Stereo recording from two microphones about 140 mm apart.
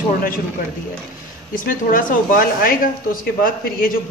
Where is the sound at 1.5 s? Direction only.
80° left.